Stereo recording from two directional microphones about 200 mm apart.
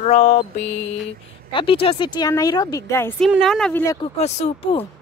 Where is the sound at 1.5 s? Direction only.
25° left (ahead or behind).